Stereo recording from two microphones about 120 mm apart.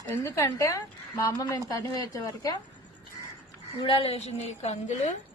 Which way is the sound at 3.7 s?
45° left (ahead or behind).